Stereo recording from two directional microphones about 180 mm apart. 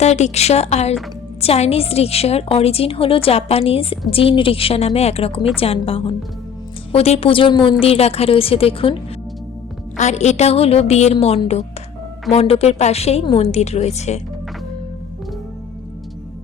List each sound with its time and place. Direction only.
0.0 s a woman's voice: 40° left (ahead or behind)
10.0 s a woman's voice: 40° left (ahead or behind)